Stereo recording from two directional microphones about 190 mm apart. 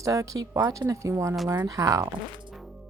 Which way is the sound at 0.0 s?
15° right (ahead or behind).